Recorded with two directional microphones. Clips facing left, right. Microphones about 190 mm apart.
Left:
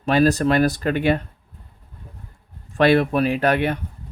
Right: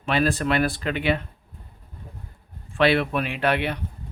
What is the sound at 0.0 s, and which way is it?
Speech, 40° left (ahead or behind).